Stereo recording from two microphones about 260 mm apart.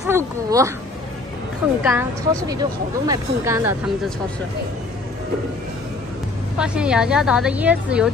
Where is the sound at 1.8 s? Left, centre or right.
Centre.